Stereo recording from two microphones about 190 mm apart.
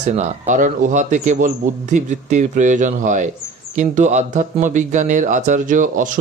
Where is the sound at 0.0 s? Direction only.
35° right (ahead or behind).